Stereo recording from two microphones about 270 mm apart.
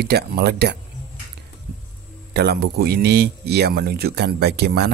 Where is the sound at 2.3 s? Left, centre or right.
Right.